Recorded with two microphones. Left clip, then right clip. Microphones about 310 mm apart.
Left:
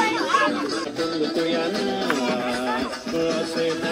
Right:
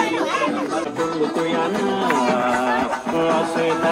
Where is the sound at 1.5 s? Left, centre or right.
Right.